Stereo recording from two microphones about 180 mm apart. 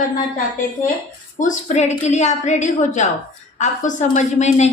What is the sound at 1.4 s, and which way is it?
A woman's voice, 45° left (ahead or behind).